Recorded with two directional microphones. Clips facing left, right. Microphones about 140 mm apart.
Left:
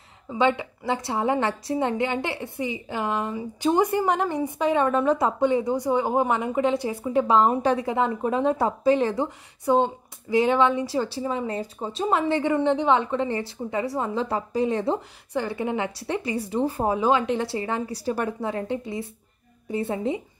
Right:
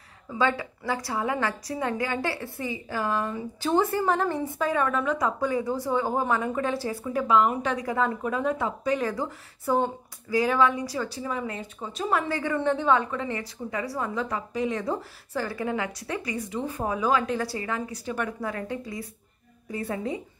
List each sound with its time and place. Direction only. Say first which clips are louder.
0.3 s a woman's voice: left 3 dB; 20° left (ahead or behind)